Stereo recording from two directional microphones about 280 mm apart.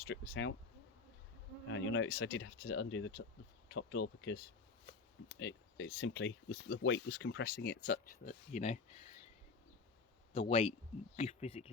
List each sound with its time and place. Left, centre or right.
0.1 s speech: left
1.7 s speech: left
5.4 s speech: left
10.3 s speech: left